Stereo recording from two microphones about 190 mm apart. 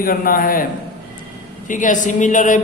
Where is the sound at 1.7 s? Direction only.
45° left (ahead or behind).